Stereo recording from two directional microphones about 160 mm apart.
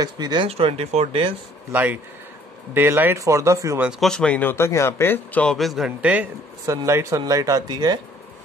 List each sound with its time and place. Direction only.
0.0 s speech: 25° right (ahead or behind)
0.5 s speech: 40° right (ahead or behind)
1.7 s speech: 10° right (ahead or behind)
3.8 s speech: centre (ahead or behind)
6.6 s speech: 20° right (ahead or behind)